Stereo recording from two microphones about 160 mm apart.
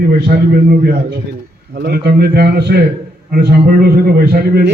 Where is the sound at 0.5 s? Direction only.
75° right (ahead or behind); by 2.8 s 90° right.